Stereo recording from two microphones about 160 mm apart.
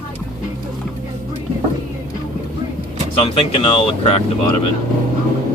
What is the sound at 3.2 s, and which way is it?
Speech, 35° left (ahead or behind).